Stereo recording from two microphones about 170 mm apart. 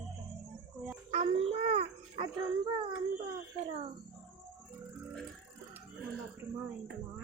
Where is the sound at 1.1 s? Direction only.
35° right (ahead or behind).